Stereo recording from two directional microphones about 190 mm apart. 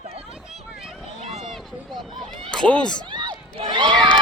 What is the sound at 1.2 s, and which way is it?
Run, 30° right (ahead or behind).